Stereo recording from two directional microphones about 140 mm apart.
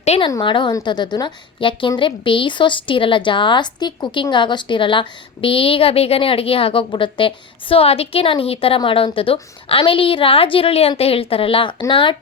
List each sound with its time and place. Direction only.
0.0 s a woman's voice: 50° left (ahead or behind)
0.3 s a woman's voice: 30° left (ahead or behind)